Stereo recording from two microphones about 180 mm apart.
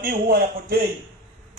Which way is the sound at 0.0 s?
55° right (ahead or behind).